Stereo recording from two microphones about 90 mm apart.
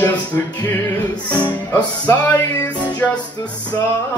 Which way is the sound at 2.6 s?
55° left (ahead or behind).